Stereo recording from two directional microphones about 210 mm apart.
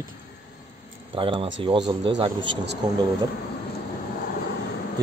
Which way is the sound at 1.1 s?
25° right (ahead or behind).